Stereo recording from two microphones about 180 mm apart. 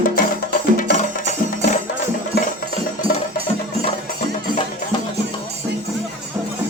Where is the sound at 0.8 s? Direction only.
50° left (ahead or behind).